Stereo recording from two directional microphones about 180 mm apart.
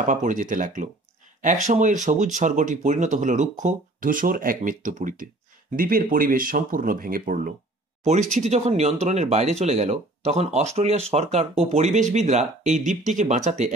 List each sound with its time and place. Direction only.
0.0 s speech: 45° right (ahead or behind)
8.0 s speech: 40° right (ahead or behind)